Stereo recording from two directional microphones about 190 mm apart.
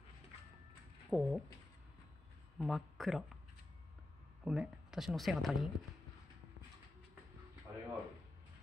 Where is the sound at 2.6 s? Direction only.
Centre (ahead or behind).